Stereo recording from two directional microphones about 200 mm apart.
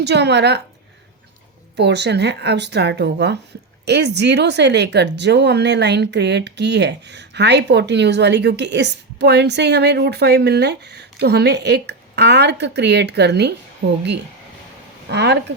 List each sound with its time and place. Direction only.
0.0 s speech: 60° right (ahead or behind)
1.7 s speech: 60° right (ahead or behind)
15.1 s speech: 60° right (ahead or behind)